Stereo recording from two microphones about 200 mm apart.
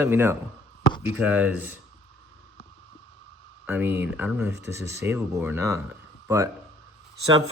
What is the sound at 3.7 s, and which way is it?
Speech, 10° right (ahead or behind).